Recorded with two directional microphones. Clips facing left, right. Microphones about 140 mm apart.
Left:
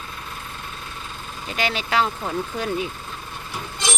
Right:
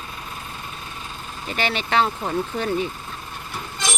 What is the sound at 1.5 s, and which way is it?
Speech, 5° left (ahead or behind).